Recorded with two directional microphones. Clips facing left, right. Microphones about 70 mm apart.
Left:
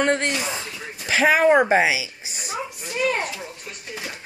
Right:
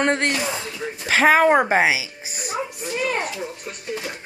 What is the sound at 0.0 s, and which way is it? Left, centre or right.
Speech, right.